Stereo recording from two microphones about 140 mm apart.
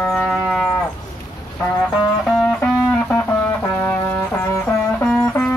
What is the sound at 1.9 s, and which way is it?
Music, 5° left (ahead or behind).